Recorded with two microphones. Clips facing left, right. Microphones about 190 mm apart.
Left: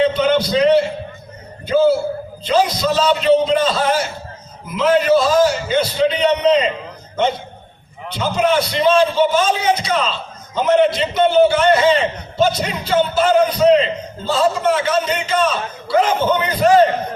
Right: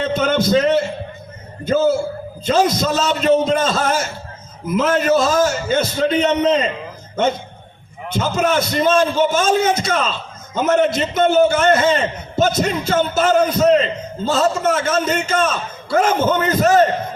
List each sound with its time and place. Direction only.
0.0 s a man's voice: 45° right (ahead or behind)
8.1 s a man's voice: 45° right (ahead or behind)